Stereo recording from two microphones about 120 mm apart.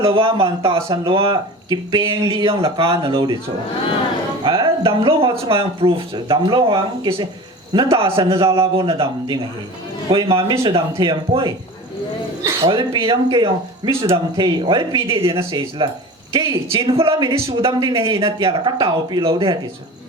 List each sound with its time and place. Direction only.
0.0 s speech: 50° right (ahead or behind)
12.6 s speech: 45° right (ahead or behind)